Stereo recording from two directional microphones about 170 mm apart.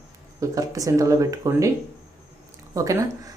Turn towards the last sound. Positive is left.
turn(degrees=-20)  # may be behind; listen again after turning